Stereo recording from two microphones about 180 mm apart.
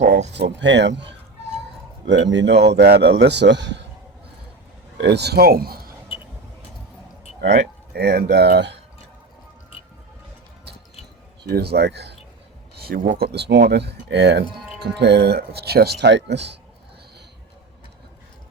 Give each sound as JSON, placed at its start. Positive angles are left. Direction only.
{"t": 0.3, "sound": "speech", "side_deg": -75}
{"t": 2.0, "sound": "speech", "side_deg": -90}
{"t": 2.6, "sound": "speech", "side_deg": -70}
{"t": 4.9, "sound": "a man's voice", "side_deg": -70}
{"t": 7.9, "sound": "speech", "side_deg": -60}
{"t": 11.4, "sound": "speech", "side_deg": -65}